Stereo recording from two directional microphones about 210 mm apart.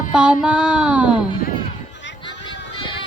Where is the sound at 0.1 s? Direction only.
5° right (ahead or behind).